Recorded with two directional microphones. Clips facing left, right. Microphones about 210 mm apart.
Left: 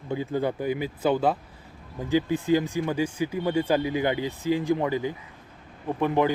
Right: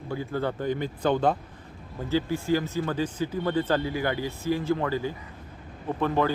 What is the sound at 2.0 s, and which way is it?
Speech, 15° left (ahead or behind).